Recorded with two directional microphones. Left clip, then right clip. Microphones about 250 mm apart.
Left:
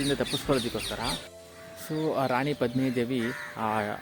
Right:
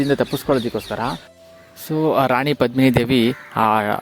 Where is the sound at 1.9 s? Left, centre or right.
Right.